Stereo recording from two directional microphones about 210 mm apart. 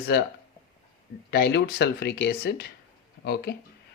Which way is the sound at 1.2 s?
50° left (ahead or behind).